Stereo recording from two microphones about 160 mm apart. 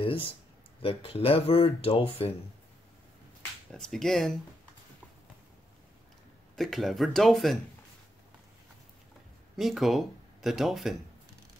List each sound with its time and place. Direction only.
0.8 s speech: 35° left (ahead or behind)
3.7 s speech: 5° left (ahead or behind)
6.5 s speech: centre (ahead or behind)
9.6 s speech: centre (ahead or behind)